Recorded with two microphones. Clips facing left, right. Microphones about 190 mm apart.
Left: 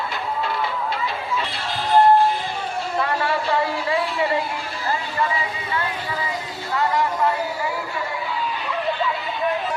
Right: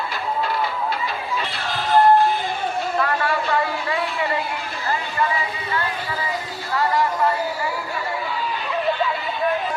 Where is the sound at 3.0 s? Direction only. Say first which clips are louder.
Left 1 dB; 25° left (ahead or behind).